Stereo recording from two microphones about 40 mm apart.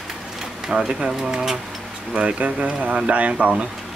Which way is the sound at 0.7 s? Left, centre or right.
Centre.